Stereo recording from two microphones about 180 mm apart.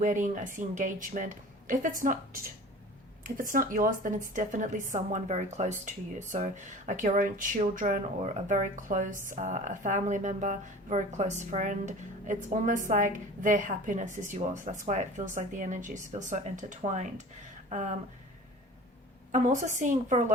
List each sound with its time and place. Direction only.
0.0 s a woman's voice: 45° right (ahead or behind)
19.3 s a woman's voice: 45° right (ahead or behind)